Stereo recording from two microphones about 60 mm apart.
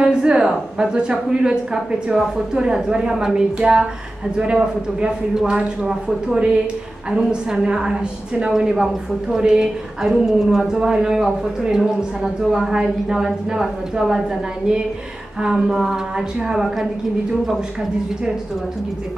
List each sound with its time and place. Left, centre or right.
0.0 s a sound: centre
0.7 s a woman's voice: centre
15.4 s a woman's voice: centre